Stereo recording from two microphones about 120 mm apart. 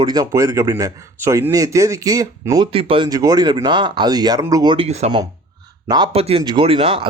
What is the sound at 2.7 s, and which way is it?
Speech, 50° right (ahead or behind).